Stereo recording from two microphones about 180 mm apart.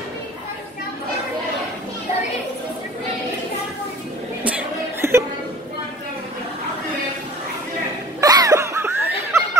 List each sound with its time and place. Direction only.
4.4 s music: 10° right (ahead or behind)
8.2 s laughter: 20° right (ahead or behind)